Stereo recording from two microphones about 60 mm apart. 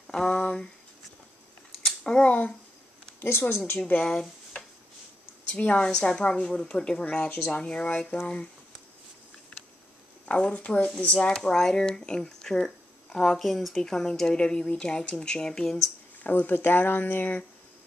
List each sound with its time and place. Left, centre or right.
0.0 s a sound: centre
1.9 s a sound: centre
3.2 s speech: left
4.1 s a sound: centre
5.6 s speech: left
7.2 s speech: left
7.6 s speech: centre
10.2 s speech: centre
16.2 s speech: left